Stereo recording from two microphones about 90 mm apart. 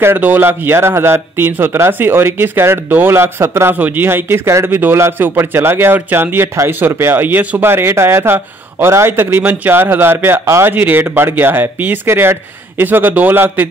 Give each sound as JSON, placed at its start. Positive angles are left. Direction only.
{"t": 0.0, "sound": "speech", "side_deg": -25}